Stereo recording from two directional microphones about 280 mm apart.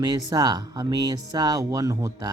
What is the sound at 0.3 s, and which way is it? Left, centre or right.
Speech, centre.